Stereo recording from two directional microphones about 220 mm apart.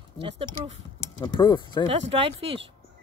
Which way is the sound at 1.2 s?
20° left (ahead or behind).